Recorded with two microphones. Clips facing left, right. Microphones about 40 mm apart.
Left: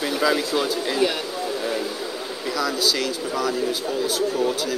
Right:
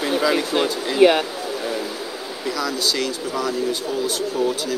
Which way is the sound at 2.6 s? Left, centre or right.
Centre.